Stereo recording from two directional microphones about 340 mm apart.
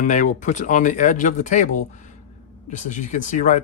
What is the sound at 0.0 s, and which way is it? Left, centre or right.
Speech, left.